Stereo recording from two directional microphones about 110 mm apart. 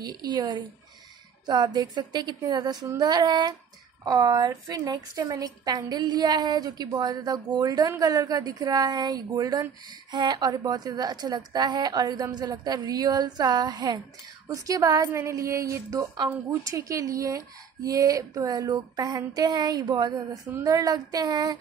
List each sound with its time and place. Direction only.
0.0 s a woman's voice: 40° right (ahead or behind)
15.1 s female singing: 25° right (ahead or behind)
16.3 s a woman's voice: 25° right (ahead or behind)